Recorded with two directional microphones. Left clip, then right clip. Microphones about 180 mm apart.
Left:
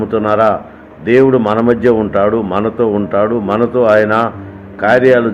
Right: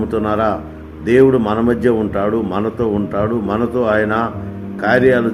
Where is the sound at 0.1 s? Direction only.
15° left (ahead or behind).